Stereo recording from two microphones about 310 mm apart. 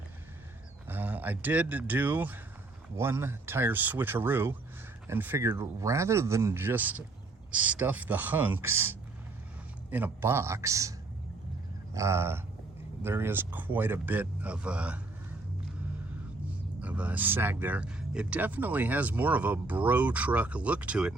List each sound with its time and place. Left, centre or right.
0.9 s speech: centre
11.9 s speech: centre
16.8 s speech: centre